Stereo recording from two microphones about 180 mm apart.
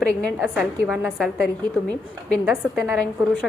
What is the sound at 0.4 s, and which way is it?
A woman's voice, 5° right (ahead or behind).